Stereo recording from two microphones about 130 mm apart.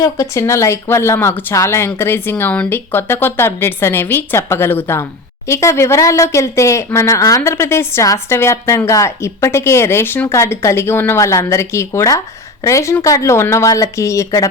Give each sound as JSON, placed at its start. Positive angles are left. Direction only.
{"t": 0.0, "sound": "a woman's voice", "side_deg": 25}